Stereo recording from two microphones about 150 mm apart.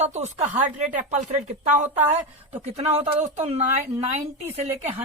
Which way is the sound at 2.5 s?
45° right (ahead or behind).